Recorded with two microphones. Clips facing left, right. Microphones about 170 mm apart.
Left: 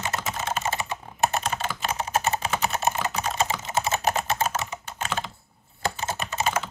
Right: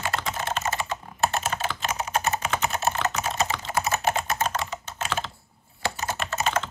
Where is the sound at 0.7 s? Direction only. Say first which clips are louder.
Right 1 dB; 20° left (ahead or behind).